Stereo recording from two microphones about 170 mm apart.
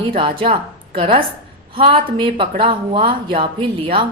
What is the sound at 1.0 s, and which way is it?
A woman's voice, 30° right (ahead or behind).